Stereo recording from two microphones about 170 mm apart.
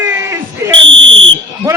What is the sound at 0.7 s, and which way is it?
Fire alarm, 90° right.